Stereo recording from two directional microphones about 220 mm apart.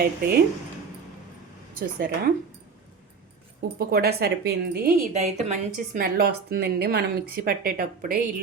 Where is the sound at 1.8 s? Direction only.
40° right (ahead or behind).